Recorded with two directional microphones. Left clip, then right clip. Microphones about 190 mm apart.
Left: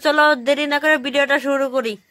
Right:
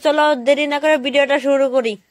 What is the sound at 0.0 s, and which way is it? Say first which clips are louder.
Speech: even; 5° right (ahead or behind).